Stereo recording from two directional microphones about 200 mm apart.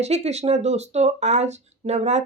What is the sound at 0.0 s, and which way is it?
Speech, 35° right (ahead or behind).